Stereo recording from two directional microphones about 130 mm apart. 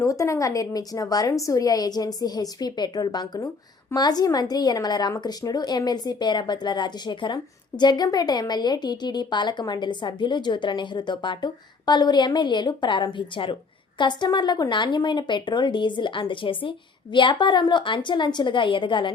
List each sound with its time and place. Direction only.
0.0 s a woman's voice: 25° left (ahead or behind)